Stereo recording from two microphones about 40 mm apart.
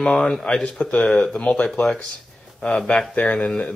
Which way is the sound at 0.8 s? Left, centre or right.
Left.